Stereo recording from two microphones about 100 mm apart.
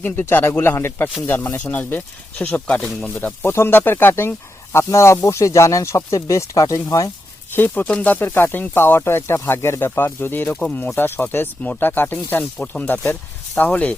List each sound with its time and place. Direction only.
0.0 s speech: 20° left (ahead or behind)
3.2 s speech: 20° left (ahead or behind)
7.5 s speech: 20° left (ahead or behind)